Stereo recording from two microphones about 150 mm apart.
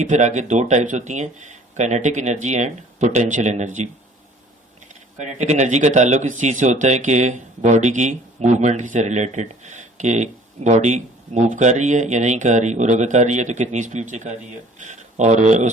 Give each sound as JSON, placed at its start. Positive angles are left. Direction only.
{"t": 0.0, "sound": "speech", "side_deg": -50}
{"t": 5.1, "sound": "speech", "side_deg": -55}